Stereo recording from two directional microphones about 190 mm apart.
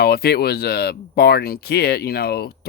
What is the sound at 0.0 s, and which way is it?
Speech, 55° left (ahead or behind).